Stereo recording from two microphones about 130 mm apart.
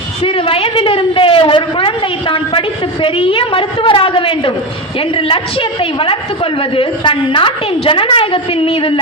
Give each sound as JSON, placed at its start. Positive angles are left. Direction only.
{"t": 0.2, "sound": "a woman's voice", "side_deg": 45}